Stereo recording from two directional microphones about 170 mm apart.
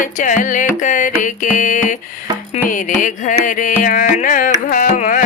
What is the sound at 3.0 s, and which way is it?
Carnatic music, 50° left (ahead or behind).